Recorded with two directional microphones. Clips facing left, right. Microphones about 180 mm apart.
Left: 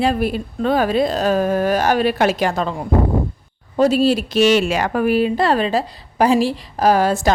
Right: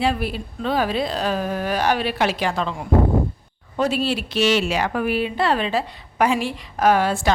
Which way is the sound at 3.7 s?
40° left (ahead or behind).